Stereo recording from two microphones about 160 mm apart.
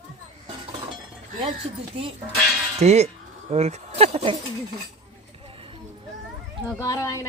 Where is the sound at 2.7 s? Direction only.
45° right (ahead or behind).